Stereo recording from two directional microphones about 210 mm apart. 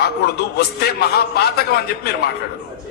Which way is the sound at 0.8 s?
50° left (ahead or behind).